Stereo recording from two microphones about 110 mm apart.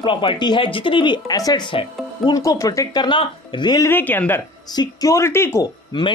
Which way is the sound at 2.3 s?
30° left (ahead or behind).